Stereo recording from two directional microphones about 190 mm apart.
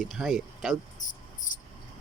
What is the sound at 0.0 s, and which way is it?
Speech, centre (ahead or behind).